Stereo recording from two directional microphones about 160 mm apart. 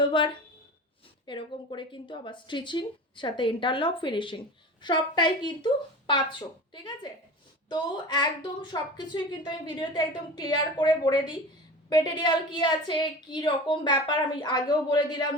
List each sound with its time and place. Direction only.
0.0 s a woman's voice: 30° left (ahead or behind)
1.3 s a woman's voice: 30° left (ahead or behind)
7.7 s a woman's voice: 25° left (ahead or behind)